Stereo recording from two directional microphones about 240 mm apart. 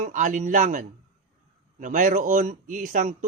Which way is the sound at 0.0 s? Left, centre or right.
Right.